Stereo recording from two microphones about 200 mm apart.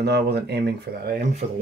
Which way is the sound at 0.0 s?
55° right (ahead or behind).